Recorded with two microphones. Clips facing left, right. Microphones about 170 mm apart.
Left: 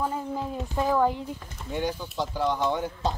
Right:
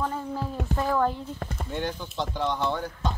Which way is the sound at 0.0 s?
15° left (ahead or behind).